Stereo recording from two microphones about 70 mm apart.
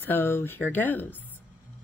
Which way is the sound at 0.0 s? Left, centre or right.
Left.